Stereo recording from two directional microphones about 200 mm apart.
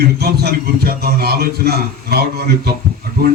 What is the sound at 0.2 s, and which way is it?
A man's voice, 55° right (ahead or behind).